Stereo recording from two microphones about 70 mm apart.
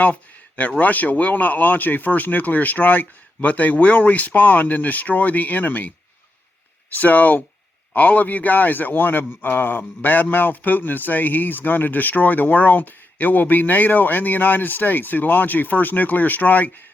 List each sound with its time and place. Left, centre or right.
0.0 s a sound: left
0.8 s a man's voice: left
6.9 s a man's voice: left